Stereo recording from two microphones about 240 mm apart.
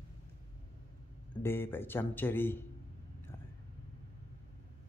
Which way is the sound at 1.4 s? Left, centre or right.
Centre.